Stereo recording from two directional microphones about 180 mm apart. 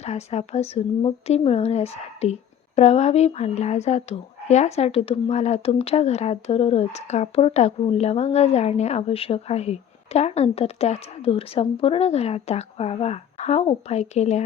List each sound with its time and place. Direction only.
0.0 s speech: 35° left (ahead or behind)